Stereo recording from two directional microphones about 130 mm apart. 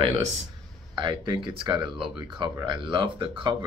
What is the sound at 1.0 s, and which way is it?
Speech, 40° right (ahead or behind).